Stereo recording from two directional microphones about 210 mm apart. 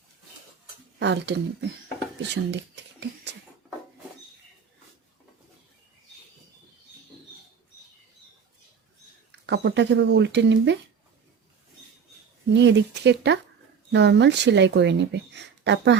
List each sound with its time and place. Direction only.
0.9 s speech: 55° right (ahead or behind)
9.3 s speech: 55° right (ahead or behind)
12.5 s speech: 55° right (ahead or behind)